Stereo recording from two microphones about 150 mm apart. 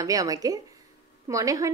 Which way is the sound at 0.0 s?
25° right (ahead or behind).